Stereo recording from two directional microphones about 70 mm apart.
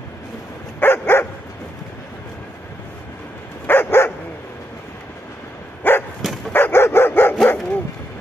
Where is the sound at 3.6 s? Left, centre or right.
Left.